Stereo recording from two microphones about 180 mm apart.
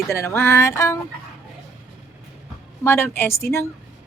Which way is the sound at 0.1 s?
15° left (ahead or behind).